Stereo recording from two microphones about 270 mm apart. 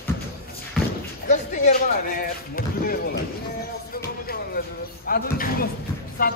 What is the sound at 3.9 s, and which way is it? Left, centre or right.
Music, left.